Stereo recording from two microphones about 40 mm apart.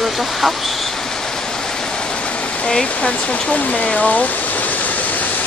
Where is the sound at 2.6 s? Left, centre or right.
Left.